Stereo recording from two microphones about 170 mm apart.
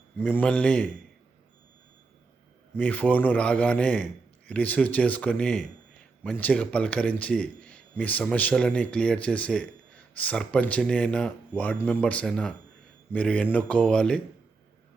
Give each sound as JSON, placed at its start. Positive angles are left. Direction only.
{"t": 0.3, "sound": "speech", "side_deg": 10}
{"t": 2.7, "sound": "speech", "side_deg": 10}